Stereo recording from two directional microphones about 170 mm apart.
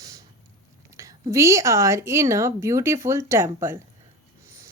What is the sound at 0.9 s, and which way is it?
Speech, 20° right (ahead or behind).